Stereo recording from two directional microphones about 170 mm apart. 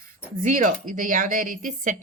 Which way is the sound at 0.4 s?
50° right (ahead or behind).